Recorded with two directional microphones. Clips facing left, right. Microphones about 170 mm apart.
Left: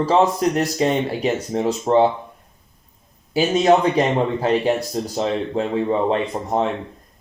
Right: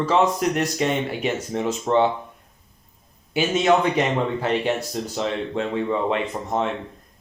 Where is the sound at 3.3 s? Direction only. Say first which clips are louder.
Left 3 dB; 35° left (ahead or behind).